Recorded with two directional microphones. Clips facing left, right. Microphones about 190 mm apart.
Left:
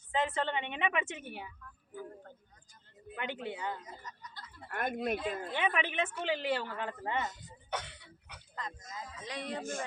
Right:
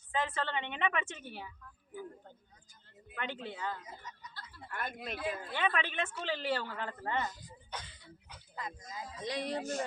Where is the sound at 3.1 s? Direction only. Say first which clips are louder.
Left 2 dB; 15° left (ahead or behind).